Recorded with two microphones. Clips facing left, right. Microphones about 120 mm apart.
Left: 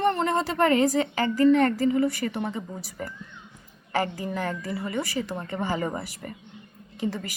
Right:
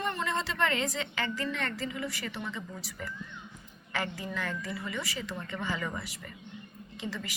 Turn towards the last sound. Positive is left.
turn(degrees=50)  # may be behind; listen again after turning